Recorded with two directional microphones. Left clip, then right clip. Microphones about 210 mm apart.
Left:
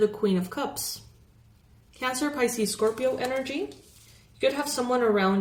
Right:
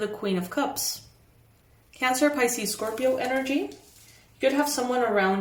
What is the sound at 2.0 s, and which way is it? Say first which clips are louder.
Speech: right 4 dB; 15° right (ahead or behind).